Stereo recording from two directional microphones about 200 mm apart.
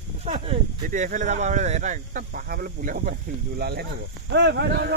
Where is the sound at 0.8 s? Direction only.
40° right (ahead or behind).